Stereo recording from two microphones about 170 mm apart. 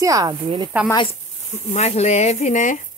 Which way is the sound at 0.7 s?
10° right (ahead or behind).